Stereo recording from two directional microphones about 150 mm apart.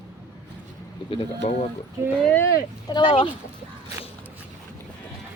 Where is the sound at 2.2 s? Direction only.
10° left (ahead or behind).